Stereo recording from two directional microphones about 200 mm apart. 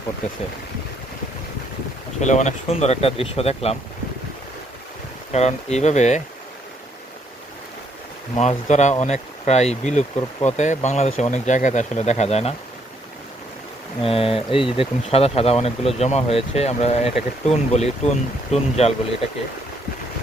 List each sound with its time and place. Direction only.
2.2 s speech: 35° left (ahead or behind)
5.3 s speech: 35° left (ahead or behind)
8.4 s speech: 35° left (ahead or behind)
14.0 s speech: 30° left (ahead or behind)